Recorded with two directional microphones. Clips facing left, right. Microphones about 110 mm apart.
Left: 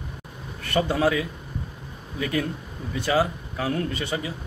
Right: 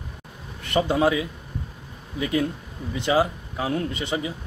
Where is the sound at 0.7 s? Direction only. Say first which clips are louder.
Right 2 dB; 20° right (ahead or behind).